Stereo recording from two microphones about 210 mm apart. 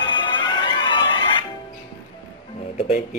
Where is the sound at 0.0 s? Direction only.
20° left (ahead or behind).